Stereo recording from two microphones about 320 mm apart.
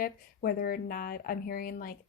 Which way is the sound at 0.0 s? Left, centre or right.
Left.